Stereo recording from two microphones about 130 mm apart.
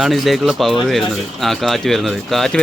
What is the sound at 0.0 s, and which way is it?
Speech, centre (ahead or behind).